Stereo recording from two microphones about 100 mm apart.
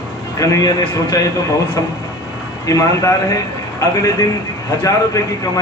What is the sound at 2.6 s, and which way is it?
Speech, 35° left (ahead or behind).